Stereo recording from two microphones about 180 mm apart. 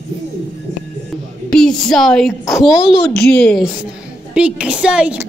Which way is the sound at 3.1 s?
60° left (ahead or behind).